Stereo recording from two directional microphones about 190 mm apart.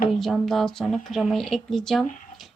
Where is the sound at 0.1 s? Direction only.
Centre (ahead or behind).